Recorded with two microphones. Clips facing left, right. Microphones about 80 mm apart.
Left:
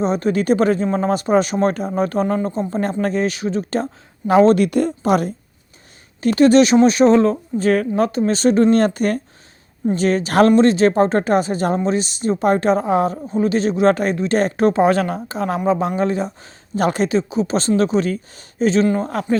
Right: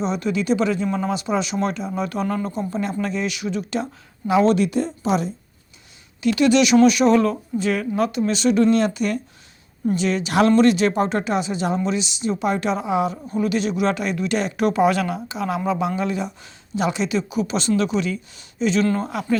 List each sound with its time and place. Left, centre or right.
0.0 s speech: left
6.1 s speech: left
7.6 s speech: left
13.2 s speech: left